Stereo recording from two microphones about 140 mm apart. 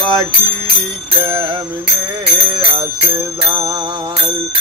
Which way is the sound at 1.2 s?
35° right (ahead or behind).